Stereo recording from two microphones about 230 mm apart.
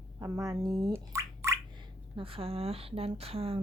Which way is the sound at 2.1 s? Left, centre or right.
Right.